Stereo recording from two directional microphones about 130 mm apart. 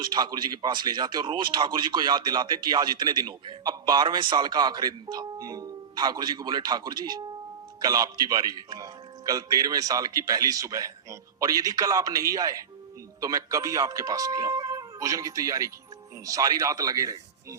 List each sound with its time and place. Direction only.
0.0 s a man's voice: 35° right (ahead or behind)